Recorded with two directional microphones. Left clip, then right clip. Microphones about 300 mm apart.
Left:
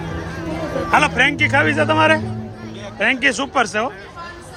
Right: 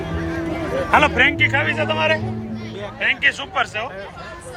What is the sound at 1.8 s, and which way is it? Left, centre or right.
Speech, left.